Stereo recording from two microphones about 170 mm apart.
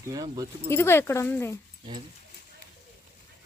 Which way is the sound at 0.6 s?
15° left (ahead or behind).